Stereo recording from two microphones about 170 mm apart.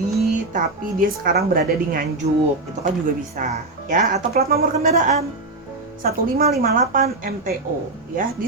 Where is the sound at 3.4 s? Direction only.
50° right (ahead or behind).